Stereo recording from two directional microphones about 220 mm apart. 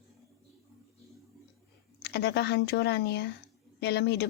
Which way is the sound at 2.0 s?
50° left (ahead or behind).